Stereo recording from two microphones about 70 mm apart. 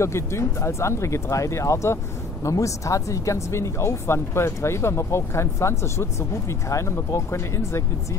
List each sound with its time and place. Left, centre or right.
0.0 s speech: left